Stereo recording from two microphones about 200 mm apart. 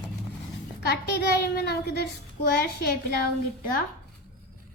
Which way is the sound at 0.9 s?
55° left (ahead or behind).